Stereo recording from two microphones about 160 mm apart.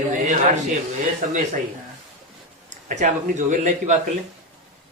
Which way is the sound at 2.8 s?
50° right (ahead or behind).